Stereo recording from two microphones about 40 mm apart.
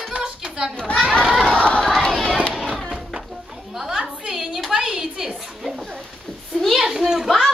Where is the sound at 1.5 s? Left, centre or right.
Left.